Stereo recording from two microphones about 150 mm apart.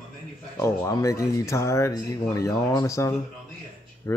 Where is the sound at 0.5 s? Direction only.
20° left (ahead or behind).